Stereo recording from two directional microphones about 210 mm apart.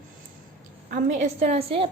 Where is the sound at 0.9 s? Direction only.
35° right (ahead or behind).